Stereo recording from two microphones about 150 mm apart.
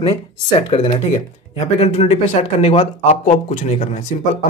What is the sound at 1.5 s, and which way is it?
A man's voice, 45° left (ahead or behind).